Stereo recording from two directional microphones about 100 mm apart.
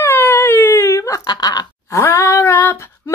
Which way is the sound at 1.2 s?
40° left (ahead or behind).